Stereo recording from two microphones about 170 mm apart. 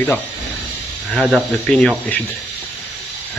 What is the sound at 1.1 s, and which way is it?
Speech, 5° right (ahead or behind).